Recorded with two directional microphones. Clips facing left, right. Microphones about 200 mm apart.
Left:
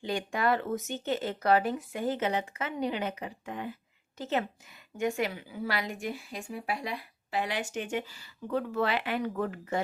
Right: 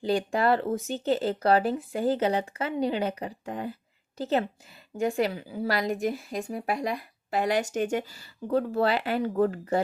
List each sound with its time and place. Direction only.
0.0 s speech: 35° right (ahead or behind)